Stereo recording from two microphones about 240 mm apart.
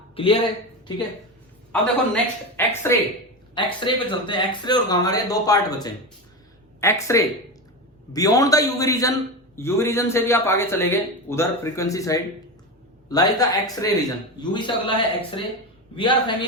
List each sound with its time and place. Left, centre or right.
1.7 s a man's voice: centre
3.5 s a man's voice: centre